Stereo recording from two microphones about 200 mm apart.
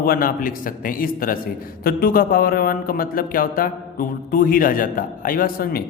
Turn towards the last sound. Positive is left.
turn(degrees=50)  # may be behind; listen again after turning